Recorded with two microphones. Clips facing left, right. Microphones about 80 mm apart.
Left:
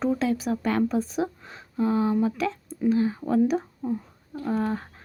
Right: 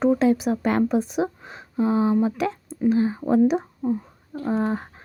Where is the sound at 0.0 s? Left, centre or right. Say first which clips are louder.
Right 6 dB; right.